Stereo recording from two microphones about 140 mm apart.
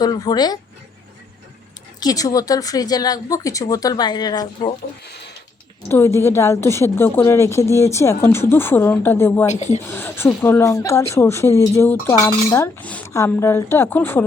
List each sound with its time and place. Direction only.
0.0 s a woman's voice: 30° left (ahead or behind)
2.0 s a woman's voice: 25° left (ahead or behind)
5.9 s a woman's voice: 20° left (ahead or behind)
9.5 s speech: 50° left (ahead or behind)
9.9 s a woman's voice: 15° left (ahead or behind)